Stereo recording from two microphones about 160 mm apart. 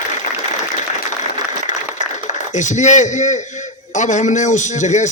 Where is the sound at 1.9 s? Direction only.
50° left (ahead or behind).